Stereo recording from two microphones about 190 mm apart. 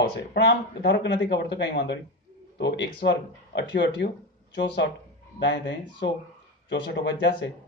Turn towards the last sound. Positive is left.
turn(degrees=65)  # may be behind; listen again after turning